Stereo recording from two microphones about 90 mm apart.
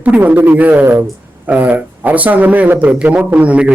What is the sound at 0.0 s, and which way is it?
Speech, 20° right (ahead or behind).